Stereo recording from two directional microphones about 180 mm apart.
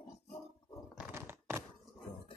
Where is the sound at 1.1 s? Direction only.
15° right (ahead or behind).